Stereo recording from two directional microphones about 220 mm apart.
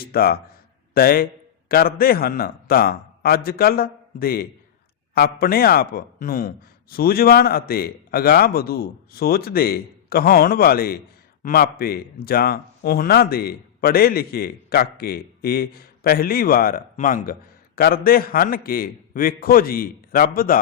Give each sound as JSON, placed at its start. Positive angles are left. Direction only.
{"t": 0.0, "sound": "a man's voice", "side_deg": 45}